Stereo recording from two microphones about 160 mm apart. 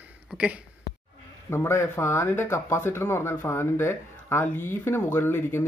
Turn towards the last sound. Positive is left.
turn(degrees=15)  # may be behind; listen again after turning